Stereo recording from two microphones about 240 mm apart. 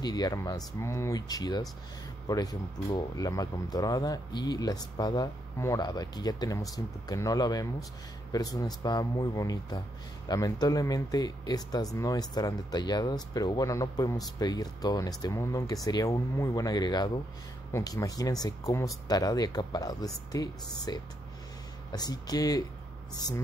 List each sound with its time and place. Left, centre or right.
0.0 s speech: centre